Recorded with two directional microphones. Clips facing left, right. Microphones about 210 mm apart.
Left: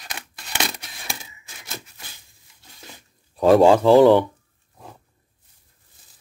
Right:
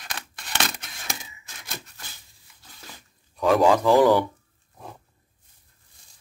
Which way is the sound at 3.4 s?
30° left (ahead or behind).